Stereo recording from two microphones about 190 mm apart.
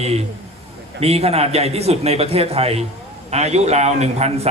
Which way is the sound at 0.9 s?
35° right (ahead or behind).